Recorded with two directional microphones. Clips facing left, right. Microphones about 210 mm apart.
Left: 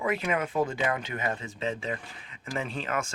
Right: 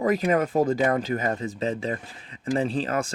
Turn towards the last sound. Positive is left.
turn(degrees=-35)  # may be behind; listen again after turning